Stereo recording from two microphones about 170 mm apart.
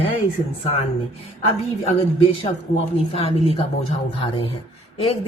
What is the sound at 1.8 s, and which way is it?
A woman's voice, 35° left (ahead or behind).